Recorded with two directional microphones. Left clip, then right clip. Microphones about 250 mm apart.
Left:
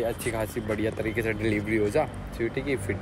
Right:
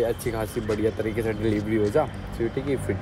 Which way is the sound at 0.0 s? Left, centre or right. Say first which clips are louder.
Right 3 dB; centre.